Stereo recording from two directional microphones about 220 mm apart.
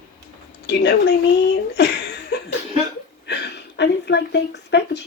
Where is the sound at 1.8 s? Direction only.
50° left (ahead or behind).